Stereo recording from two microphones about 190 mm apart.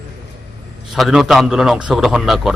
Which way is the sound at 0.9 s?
Centre (ahead or behind).